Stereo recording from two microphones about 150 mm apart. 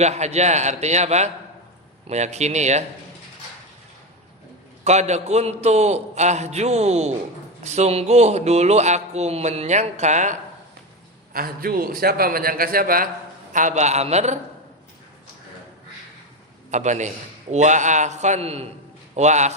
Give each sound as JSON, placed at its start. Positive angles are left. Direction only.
{"t": 0.0, "sound": "speech", "side_deg": -50}
{"t": 4.8, "sound": "speech", "side_deg": -50}
{"t": 11.3, "sound": "a man's voice", "side_deg": -80}
{"t": 13.5, "sound": "speech", "side_deg": -55}
{"t": 16.7, "sound": "speech", "side_deg": -55}